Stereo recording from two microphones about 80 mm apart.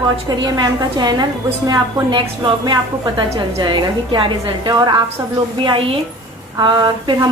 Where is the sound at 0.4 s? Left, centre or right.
Right.